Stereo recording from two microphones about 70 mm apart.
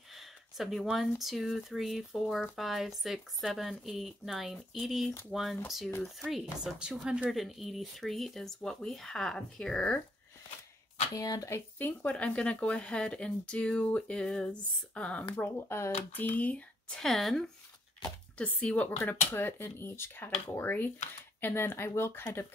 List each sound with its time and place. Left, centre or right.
0.1 s a sound: centre
0.9 s speech: centre
11.1 s speech: left
11.8 s speech: left
15.4 s speech: left; by 17.0 s centre
17.0 s speech: centre
18.4 s speech: centre; by 22.5 s left